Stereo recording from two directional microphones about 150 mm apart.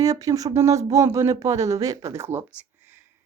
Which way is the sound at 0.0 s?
25° right (ahead or behind).